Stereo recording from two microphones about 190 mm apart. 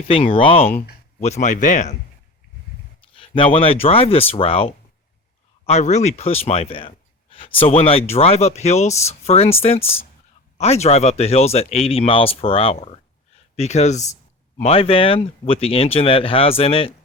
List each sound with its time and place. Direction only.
0.1 s speech: 30° left (ahead or behind)
3.2 s speech: 30° left (ahead or behind)